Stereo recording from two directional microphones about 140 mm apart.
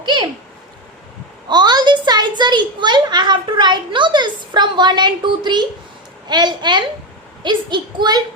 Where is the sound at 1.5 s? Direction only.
30° right (ahead or behind).